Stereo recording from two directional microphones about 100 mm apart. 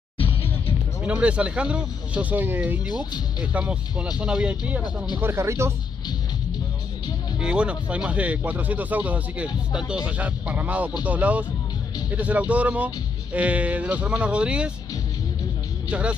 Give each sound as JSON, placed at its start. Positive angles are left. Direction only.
{"t": 1.0, "sound": "speech", "side_deg": -10}
{"t": 5.2, "sound": "speech", "side_deg": -25}
{"t": 7.3, "sound": "speech", "side_deg": -10}
{"t": 15.9, "sound": "speech", "side_deg": -10}